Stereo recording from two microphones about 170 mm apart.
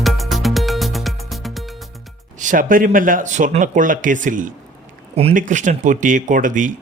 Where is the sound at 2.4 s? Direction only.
50° right (ahead or behind).